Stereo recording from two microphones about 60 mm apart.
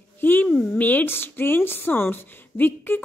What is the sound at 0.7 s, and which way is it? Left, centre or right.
A woman's voice, left.